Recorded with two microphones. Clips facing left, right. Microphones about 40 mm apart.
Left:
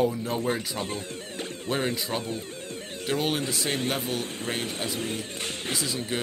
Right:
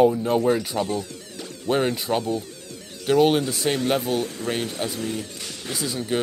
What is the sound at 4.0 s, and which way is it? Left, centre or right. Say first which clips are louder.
Speech: right 6 dB; left.